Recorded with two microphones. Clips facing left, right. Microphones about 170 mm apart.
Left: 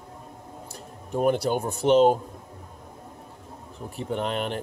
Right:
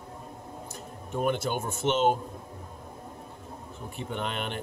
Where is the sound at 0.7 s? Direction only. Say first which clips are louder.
Left 5 dB; 35° left (ahead or behind).